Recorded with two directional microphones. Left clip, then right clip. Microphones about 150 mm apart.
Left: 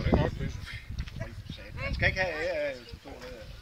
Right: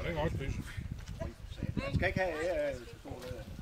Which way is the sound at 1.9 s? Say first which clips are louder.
Left 5 dB; 50° left (ahead or behind).